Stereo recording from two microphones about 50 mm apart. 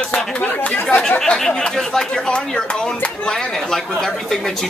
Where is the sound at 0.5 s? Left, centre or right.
Left.